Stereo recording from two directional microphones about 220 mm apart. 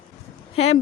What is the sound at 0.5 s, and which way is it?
Speech, 30° left (ahead or behind).